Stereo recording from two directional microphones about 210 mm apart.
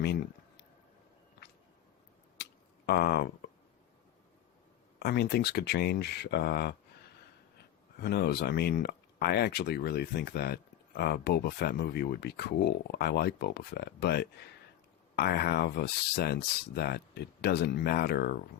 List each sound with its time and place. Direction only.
2.4 s a sound: 50° left (ahead or behind)
4.9 s speech: 50° left (ahead or behind)
8.0 s speech: 50° left (ahead or behind)